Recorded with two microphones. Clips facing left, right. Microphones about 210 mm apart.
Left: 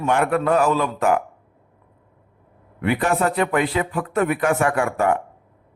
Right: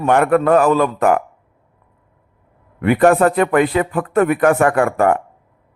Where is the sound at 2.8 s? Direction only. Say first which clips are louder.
Right 8 dB; 50° right (ahead or behind).